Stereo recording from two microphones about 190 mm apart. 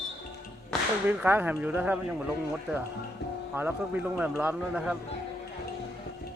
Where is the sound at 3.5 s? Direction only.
10° right (ahead or behind).